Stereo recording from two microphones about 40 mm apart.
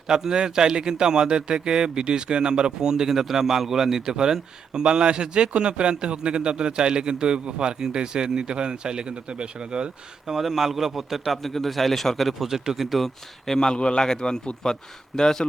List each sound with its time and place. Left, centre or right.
0.1 s speech: centre
10.2 s a man's voice: centre
12.5 s speech: centre
13.5 s a man's voice: centre